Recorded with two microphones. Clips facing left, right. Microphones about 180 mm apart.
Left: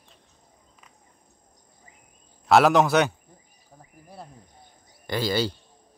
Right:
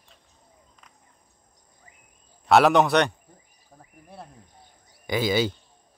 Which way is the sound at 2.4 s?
Centre (ahead or behind).